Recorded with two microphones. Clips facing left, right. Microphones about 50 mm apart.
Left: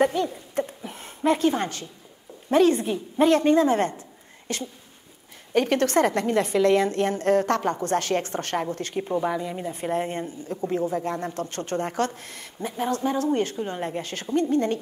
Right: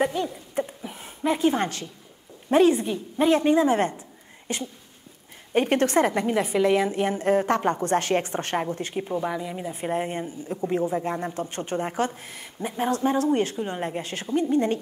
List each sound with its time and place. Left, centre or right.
0.0 s a sound: centre
2.7 s a woman's voice: centre
3.3 s a woman's voice: centre
5.9 s a woman's voice: centre
9.0 s a woman's voice: centre
12.8 s a woman's voice: right
13.6 s a woman's voice: centre